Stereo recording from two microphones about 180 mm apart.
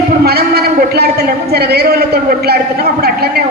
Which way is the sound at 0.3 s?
60° right (ahead or behind).